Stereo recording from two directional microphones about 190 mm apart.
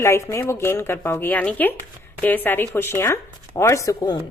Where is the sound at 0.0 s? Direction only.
15° left (ahead or behind).